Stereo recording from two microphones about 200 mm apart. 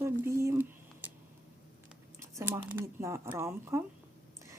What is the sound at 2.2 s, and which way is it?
Speech, 15° right (ahead or behind).